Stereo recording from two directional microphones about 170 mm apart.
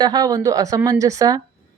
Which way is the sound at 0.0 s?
20° right (ahead or behind).